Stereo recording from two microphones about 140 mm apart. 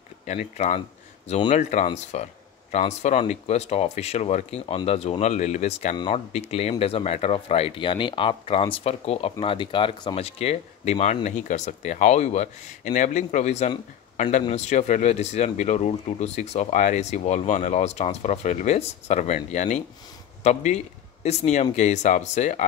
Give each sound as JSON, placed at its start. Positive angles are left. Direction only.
{"t": 0.3, "sound": "speech", "side_deg": 55}